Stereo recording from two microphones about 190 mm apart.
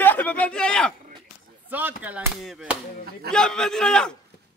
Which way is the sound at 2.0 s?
5° right (ahead or behind).